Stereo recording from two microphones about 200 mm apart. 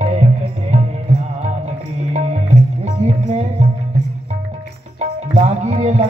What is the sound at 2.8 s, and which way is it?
Music, 35° right (ahead or behind).